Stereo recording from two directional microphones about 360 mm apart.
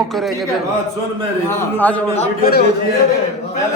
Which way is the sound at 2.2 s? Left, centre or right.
Left.